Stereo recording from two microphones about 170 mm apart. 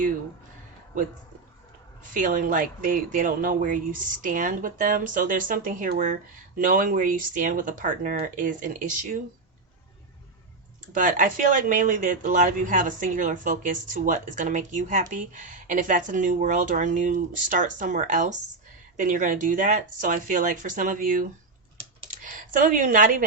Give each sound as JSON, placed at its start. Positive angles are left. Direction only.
{"t": 2.2, "sound": "speech", "side_deg": -50}
{"t": 10.9, "sound": "speech", "side_deg": -50}